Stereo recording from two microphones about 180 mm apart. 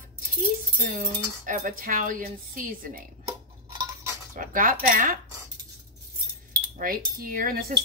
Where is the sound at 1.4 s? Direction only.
50° right (ahead or behind).